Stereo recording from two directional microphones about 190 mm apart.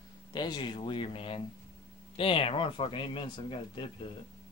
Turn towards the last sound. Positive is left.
turn(degrees=25)  # may be behind; listen again after turning